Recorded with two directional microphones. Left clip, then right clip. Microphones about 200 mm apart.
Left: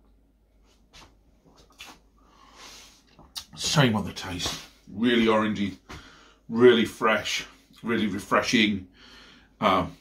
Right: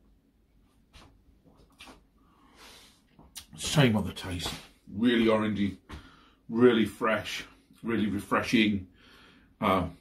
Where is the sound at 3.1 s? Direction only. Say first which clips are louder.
Left 8 dB; centre (ahead or behind).